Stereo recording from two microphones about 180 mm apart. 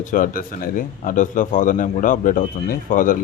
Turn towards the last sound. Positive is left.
turn(degrees=50)  # may be behind; listen again after turning